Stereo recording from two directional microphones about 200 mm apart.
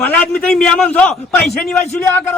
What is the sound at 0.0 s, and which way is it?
A man's voice, 5° left (ahead or behind).